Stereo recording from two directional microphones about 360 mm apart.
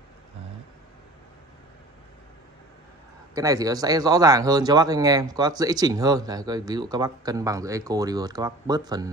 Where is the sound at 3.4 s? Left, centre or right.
Centre.